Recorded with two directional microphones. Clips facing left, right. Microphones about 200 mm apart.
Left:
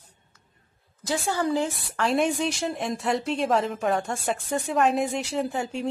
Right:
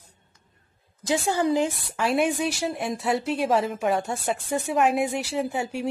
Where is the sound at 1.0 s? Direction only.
15° right (ahead or behind).